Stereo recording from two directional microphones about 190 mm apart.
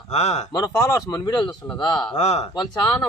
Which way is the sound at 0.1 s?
35° left (ahead or behind).